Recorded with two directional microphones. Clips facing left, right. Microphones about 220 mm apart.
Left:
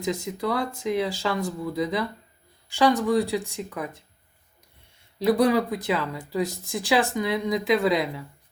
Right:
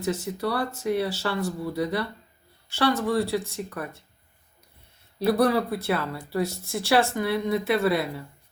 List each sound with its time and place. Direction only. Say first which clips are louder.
0.0 s speech: even; 15° left (ahead or behind)
0.9 s speech: left 2 dB; 90° left
1.2 s speech: left 1 dB; 15° left (ahead or behind)
5.2 s speech: left 1 dB; 15° left (ahead or behind)
7.5 s speech: left 3 dB; 90° left